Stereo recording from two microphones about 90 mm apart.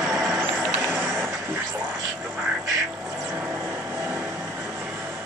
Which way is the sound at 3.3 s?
25° right (ahead or behind).